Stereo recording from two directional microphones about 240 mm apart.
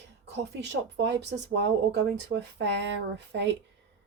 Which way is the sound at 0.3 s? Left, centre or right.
Right.